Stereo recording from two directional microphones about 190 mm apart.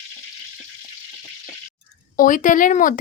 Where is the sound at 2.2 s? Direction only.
45° left (ahead or behind).